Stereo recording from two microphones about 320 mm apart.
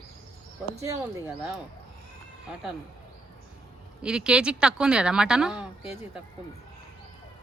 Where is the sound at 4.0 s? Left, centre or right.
Centre.